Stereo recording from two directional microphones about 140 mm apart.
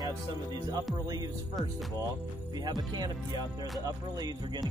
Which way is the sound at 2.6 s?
30° right (ahead or behind).